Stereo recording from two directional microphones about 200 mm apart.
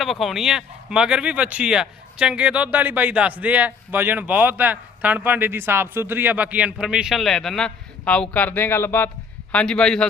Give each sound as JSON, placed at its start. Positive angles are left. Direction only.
{"t": 0.0, "sound": "a man's voice", "side_deg": 0}